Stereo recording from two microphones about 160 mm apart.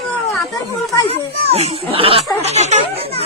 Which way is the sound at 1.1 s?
40° right (ahead or behind).